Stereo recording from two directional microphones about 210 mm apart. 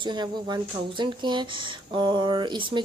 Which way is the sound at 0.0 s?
20° right (ahead or behind).